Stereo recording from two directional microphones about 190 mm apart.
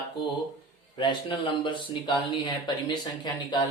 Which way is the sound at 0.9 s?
25° left (ahead or behind).